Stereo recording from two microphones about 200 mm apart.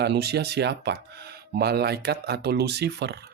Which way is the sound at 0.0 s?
55° right (ahead or behind).